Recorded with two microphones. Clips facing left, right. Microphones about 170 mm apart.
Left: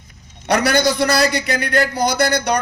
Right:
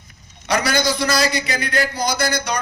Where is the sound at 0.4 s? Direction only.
60° left (ahead or behind).